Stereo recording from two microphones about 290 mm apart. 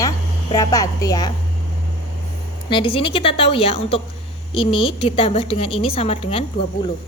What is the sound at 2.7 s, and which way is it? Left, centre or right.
A woman's voice, centre.